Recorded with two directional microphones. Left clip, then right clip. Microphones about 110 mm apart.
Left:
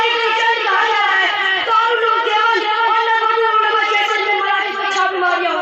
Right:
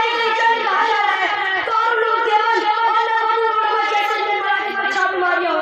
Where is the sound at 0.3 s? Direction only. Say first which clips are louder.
Left 1 dB; 35° right (ahead or behind).